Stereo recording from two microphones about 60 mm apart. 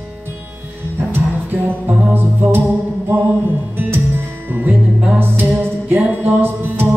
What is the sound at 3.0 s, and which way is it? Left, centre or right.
Music, right.